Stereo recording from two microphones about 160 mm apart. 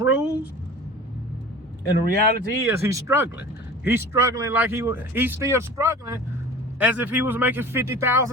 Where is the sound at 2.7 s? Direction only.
20° right (ahead or behind).